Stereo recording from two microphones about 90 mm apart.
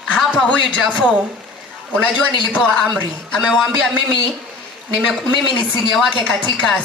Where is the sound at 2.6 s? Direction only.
5° right (ahead or behind).